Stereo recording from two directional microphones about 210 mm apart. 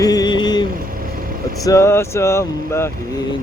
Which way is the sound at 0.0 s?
20° left (ahead or behind).